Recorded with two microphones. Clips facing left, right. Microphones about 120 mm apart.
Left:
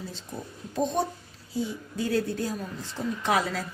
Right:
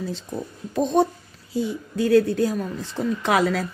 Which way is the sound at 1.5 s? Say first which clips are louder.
Right 5 dB; 75° right (ahead or behind).